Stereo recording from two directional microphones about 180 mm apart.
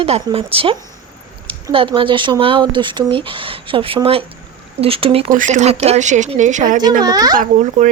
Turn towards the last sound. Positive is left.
turn(degrees=-45)  # may be behind; listen again after turning